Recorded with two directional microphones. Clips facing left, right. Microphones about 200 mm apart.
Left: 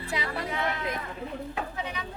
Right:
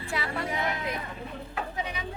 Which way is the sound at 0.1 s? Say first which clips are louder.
Even; 20° left (ahead or behind).